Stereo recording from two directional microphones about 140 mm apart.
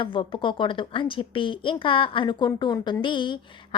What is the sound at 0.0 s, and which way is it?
A woman's voice, 35° left (ahead or behind).